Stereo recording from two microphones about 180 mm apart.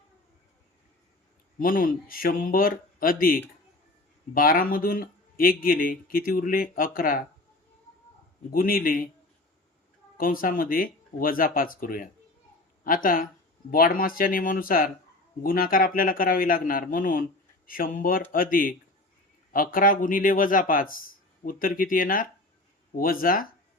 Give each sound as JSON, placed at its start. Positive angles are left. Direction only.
{"t": 1.5, "sound": "speech", "side_deg": 50}
{"t": 8.5, "sound": "speech", "side_deg": 55}
{"t": 10.2, "sound": "speech", "side_deg": 50}